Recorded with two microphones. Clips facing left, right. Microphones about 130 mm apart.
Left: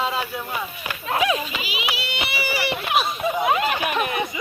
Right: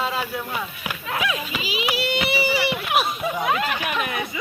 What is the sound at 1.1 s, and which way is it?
Children playing, 30° left (ahead or behind).